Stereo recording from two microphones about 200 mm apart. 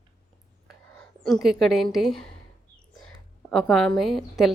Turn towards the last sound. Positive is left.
turn(degrees=0)  # may be behind; listen again after turning